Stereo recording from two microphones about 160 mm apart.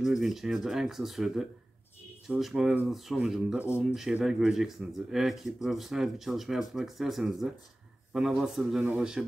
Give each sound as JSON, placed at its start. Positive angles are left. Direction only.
{"t": 0.0, "sound": "speech", "side_deg": 0}